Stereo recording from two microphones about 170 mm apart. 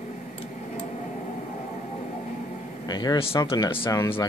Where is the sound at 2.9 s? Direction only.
25° left (ahead or behind).